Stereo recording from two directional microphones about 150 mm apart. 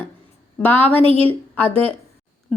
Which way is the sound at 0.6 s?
10° left (ahead or behind).